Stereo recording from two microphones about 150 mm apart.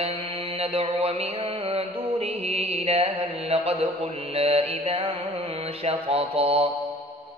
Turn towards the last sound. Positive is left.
turn(degrees=-40)  # may be behind; listen again after turning